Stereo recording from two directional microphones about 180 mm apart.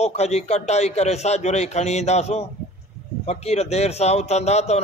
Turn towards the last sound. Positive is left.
turn(degrees=35)  # may be behind; listen again after turning